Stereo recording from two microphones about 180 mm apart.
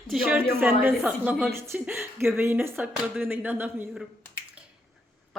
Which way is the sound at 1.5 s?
15° right (ahead or behind).